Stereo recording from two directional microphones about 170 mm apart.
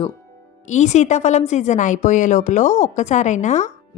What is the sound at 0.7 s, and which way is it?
A woman's voice, 45° left (ahead or behind).